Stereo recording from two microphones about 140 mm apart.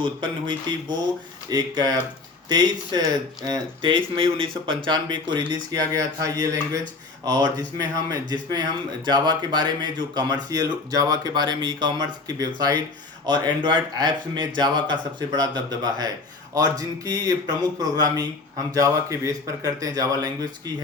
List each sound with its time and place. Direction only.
0.0 s speech: 35° right (ahead or behind)